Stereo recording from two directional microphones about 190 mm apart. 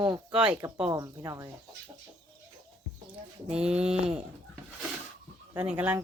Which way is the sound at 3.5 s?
5° right (ahead or behind).